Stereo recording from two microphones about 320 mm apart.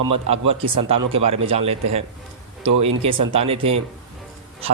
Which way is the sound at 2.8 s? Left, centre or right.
Centre.